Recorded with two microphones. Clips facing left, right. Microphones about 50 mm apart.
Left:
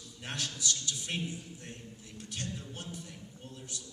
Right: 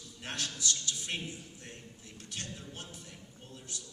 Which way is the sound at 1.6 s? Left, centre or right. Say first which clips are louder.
Left 2 dB; centre.